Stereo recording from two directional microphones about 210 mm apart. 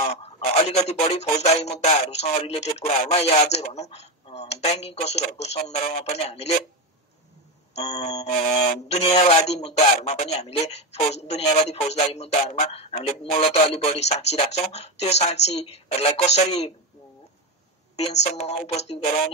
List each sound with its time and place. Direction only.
0.0 s telephone: 30° left (ahead or behind)
1.1 s speech: 30° left (ahead or behind)
7.7 s speech: 35° left (ahead or behind)
17.9 s speech: 30° left (ahead or behind)